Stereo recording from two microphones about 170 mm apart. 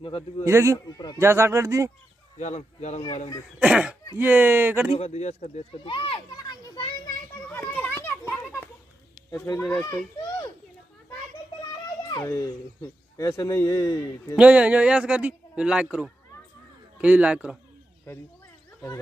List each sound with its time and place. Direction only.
0.5 s a man's voice: 15° right (ahead or behind)
0.8 s a man's voice: 20° left (ahead or behind)
1.2 s a man's voice: 15° right (ahead or behind)
2.3 s speech: 45° left (ahead or behind)
3.5 s a man's voice: 5° right (ahead or behind)
4.9 s speech: 40° left (ahead or behind); by 6.9 s 25° left (ahead or behind)
7.4 s children playing: 10° left (ahead or behind)
9.3 s speech: 15° left (ahead or behind)
12.1 s a child's voice: 20° left (ahead or behind)
14.3 s a man's voice: 5° right (ahead or behind)